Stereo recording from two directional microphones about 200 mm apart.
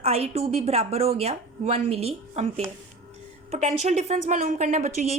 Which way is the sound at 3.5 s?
35° right (ahead or behind).